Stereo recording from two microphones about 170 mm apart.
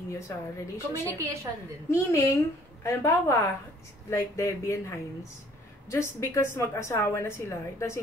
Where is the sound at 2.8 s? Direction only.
15° left (ahead or behind).